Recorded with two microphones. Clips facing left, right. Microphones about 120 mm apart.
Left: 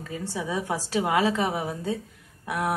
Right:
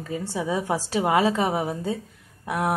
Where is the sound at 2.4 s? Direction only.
20° right (ahead or behind).